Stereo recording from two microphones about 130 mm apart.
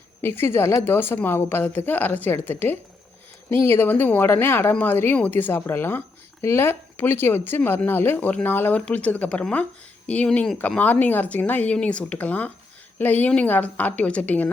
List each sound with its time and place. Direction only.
0.2 s speech: 15° left (ahead or behind)